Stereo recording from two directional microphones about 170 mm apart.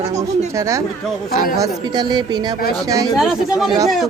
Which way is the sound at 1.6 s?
25° right (ahead or behind).